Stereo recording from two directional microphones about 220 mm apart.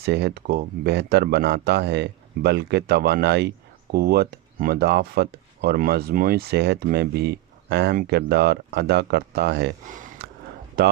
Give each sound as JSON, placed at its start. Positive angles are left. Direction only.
{"t": 0.0, "sound": "speech", "side_deg": -50}
{"t": 10.2, "sound": "a sound", "side_deg": -45}
{"t": 10.8, "sound": "speech", "side_deg": -45}